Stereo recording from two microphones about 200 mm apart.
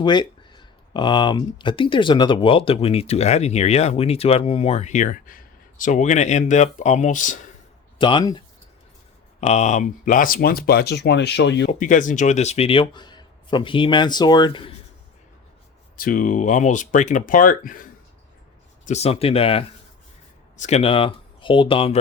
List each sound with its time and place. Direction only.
0.0 s speech: 20° left (ahead or behind); by 7.4 s 40° left (ahead or behind)
7.9 s speech: 25° left (ahead or behind)
9.4 s speech: 35° left (ahead or behind); by 11.7 s 60° left (ahead or behind)
11.7 s speech: 40° left (ahead or behind); by 14.7 s 25° left (ahead or behind)
16.0 s speech: 45° left (ahead or behind)
18.9 s speech: 30° left (ahead or behind)